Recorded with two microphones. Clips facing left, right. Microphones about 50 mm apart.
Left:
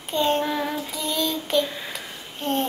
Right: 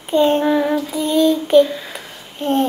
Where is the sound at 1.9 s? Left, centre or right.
Centre.